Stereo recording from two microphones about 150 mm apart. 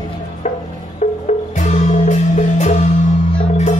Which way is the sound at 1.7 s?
50° left (ahead or behind).